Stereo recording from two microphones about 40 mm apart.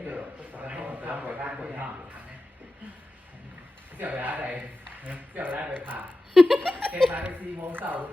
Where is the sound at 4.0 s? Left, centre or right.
Right.